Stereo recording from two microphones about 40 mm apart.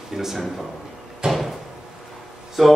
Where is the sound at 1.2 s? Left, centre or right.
Right.